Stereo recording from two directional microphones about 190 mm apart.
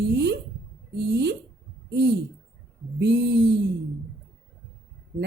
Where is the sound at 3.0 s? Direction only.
65° right (ahead or behind).